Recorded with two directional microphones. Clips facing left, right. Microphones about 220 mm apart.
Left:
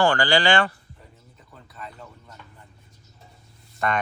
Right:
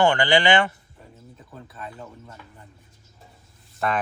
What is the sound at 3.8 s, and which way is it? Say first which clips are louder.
Speech: even; 5° right (ahead or behind).